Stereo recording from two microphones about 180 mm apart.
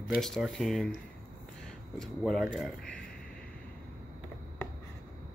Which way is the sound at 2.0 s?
Centre (ahead or behind).